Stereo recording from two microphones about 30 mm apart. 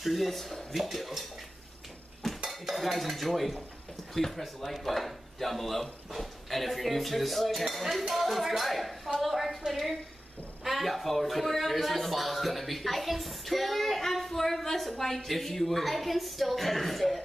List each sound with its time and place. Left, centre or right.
0.0 s a man's voice: centre
0.7 s speech: centre
2.2 s dishes: centre
2.7 s a man's voice: centre